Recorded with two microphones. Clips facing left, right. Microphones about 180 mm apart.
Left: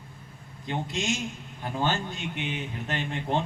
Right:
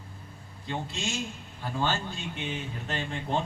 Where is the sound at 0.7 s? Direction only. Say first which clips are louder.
Left 4 dB; 20° left (ahead or behind).